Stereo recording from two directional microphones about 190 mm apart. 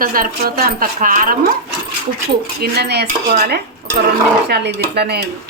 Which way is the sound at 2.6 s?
60° right (ahead or behind).